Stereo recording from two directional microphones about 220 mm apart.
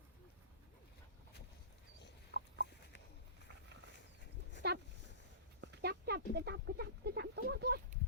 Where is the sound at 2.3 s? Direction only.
45° right (ahead or behind).